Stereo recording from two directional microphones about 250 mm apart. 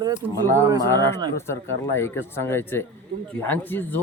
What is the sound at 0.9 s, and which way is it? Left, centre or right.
A man's voice, centre.